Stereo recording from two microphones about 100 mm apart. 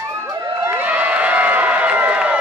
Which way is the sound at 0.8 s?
15° right (ahead or behind).